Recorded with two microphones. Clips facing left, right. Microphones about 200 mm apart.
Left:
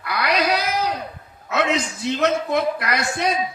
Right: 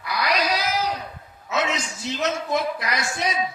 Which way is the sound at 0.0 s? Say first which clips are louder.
Left 3 dB; 60° left (ahead or behind).